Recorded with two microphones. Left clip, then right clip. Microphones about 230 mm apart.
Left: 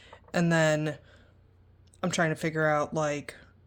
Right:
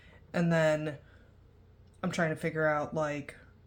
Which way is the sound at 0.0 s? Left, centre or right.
Left.